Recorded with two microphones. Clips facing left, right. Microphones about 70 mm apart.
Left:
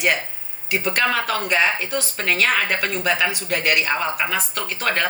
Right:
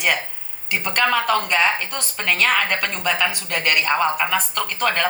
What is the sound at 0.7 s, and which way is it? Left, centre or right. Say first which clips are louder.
Speech: right 1 dB; centre.